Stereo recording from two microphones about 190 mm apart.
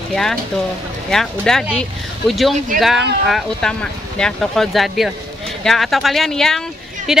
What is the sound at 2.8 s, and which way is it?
A woman's voice, centre (ahead or behind).